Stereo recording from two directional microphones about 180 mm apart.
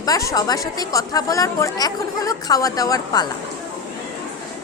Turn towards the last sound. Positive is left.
turn(degrees=20)  # may be behind; listen again after turning